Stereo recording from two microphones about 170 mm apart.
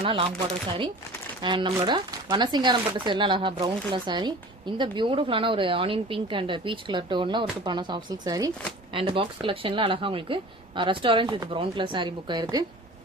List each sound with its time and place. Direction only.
0.0 s speech: 30° right (ahead or behind)
1.4 s speech: 30° right (ahead or behind)